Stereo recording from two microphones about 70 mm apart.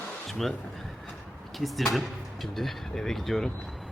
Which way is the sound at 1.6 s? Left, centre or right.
Centre.